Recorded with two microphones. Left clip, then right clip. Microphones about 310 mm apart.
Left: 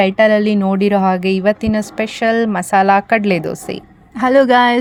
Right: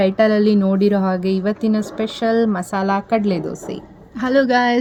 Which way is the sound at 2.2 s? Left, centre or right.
Left.